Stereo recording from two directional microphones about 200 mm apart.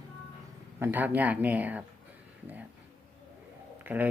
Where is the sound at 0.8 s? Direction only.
10° right (ahead or behind).